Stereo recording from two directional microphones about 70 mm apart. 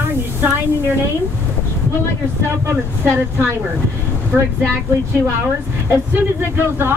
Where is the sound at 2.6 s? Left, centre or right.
Right.